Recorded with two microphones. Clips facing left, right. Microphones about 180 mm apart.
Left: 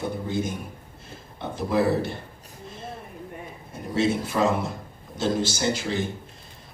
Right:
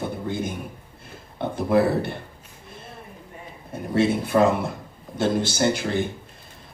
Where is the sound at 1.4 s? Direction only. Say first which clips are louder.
Right 4 dB; 55° right (ahead or behind).